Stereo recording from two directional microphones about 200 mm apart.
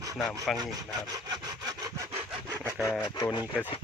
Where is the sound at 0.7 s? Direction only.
20° right (ahead or behind).